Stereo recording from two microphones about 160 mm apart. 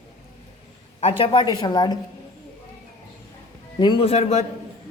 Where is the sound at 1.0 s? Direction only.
35° left (ahead or behind).